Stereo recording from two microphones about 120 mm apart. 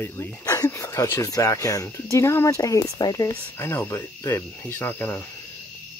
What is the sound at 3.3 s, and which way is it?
Speech, 20° left (ahead or behind).